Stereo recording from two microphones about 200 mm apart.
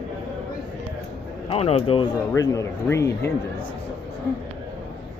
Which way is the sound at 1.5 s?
30° left (ahead or behind).